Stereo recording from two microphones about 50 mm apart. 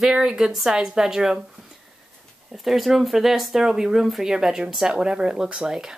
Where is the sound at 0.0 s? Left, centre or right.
Centre.